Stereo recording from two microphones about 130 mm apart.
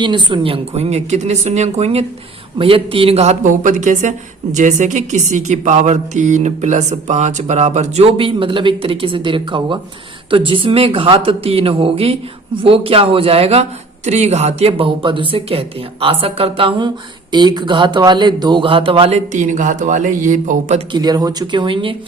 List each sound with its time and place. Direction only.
0.0 s a man's voice: 35° right (ahead or behind)
19.3 s speech: 70° right (ahead or behind)
20.9 s a man's voice: 30° right (ahead or behind)